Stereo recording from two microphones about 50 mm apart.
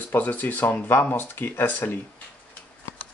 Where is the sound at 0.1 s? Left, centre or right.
Left.